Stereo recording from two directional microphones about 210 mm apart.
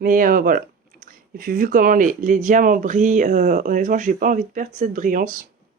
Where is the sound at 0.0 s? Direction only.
40° right (ahead or behind).